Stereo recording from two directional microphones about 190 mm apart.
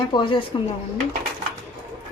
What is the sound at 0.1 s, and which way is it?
Speech, 25° left (ahead or behind).